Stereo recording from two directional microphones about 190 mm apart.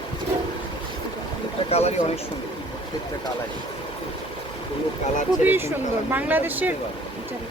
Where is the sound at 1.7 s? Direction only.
35° left (ahead or behind).